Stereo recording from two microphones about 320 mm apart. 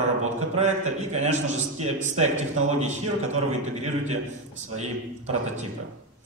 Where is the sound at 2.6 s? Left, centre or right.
Right.